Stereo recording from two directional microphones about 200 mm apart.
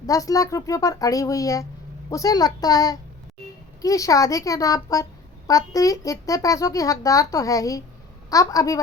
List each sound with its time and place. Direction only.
0.0 s a child's voice: 15° left (ahead or behind)